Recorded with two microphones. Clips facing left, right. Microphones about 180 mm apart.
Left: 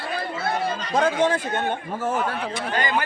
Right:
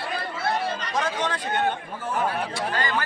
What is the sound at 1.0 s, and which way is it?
Speech, 55° left (ahead or behind).